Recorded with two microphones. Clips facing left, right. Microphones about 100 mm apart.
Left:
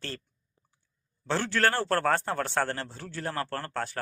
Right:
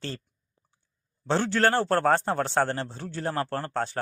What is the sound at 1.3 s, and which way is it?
A man's voice, 20° right (ahead or behind).